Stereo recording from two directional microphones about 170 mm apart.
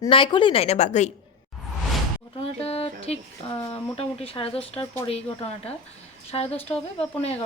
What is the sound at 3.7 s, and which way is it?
Speech, 35° left (ahead or behind).